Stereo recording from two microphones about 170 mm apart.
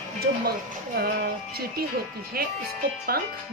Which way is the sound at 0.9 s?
60° right (ahead or behind).